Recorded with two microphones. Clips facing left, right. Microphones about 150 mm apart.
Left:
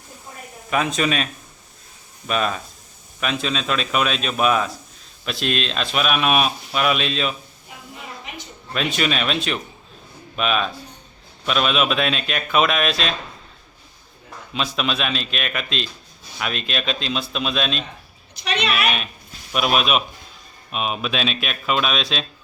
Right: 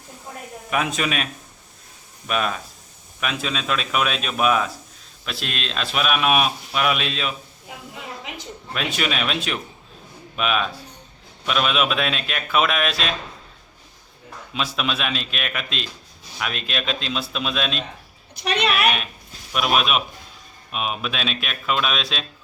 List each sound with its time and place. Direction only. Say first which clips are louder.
0.7 s speech: left 3 dB; 5° right (ahead or behind)
8.7 s speech: left 3 dB; 5° right (ahead or behind)
14.5 s speech: left 2 dB; 5° right (ahead or behind)
18.3 s a child's voice: right 2 dB; 55° right (ahead or behind)
19.5 s speech: left 1 dB; centre (ahead or behind)